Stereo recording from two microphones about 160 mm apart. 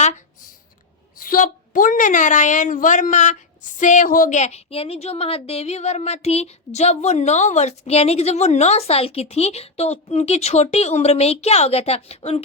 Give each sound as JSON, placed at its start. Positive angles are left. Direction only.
{"t": 1.1, "sound": "a woman's voice", "side_deg": 65}